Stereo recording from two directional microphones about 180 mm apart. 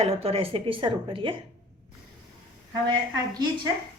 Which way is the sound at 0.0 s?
35° right (ahead or behind).